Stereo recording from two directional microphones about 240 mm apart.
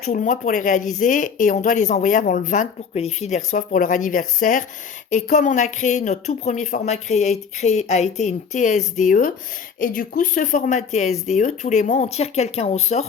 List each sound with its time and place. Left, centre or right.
0.0 s a woman's voice: left